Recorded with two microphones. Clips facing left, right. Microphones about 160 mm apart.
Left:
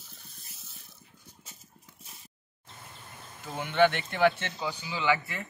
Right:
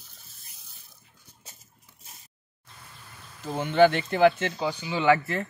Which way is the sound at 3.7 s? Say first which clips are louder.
Right 5 dB; 40° right (ahead or behind).